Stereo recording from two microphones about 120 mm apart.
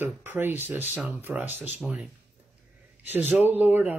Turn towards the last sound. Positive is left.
turn(degrees=-15)  # may be behind; listen again after turning